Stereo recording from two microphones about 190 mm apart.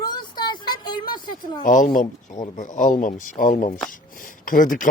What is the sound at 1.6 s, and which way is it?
A man's voice, 45° left (ahead or behind).